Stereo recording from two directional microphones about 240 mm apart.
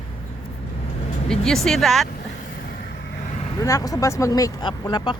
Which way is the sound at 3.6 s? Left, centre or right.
Centre.